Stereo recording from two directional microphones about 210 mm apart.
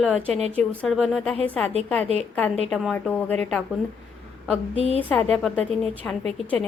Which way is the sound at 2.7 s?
Centre (ahead or behind).